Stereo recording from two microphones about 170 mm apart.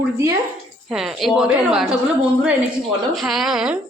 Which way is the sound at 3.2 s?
Centre (ahead or behind).